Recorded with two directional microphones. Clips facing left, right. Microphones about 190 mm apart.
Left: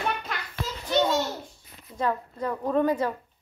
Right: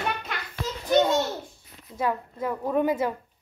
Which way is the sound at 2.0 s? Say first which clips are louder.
Even; 10° right (ahead or behind).